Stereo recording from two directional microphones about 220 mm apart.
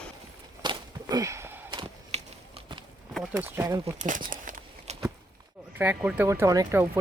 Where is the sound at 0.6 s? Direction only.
15° right (ahead or behind).